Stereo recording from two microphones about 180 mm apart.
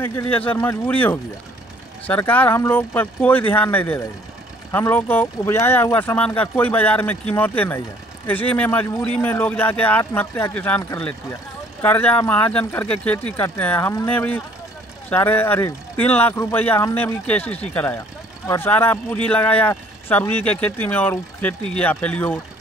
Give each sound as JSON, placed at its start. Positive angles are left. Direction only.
{"t": 0.0, "sound": "speech", "side_deg": 15}